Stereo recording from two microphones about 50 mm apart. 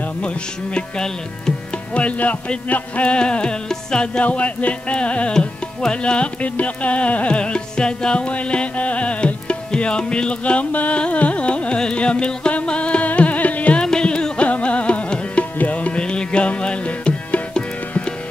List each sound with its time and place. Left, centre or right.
0.7 s speech: centre
2.0 s music: left
13.8 s music: centre